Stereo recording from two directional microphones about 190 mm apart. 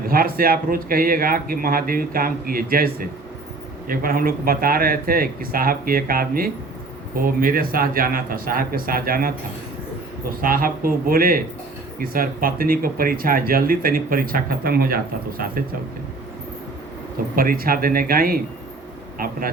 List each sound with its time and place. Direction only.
0.1 s speech: 50° right (ahead or behind)
10.4 s speech: 50° right (ahead or behind)
17.3 s speech: 50° right (ahead or behind)